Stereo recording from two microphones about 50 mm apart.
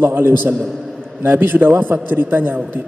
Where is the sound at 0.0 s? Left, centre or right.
Right.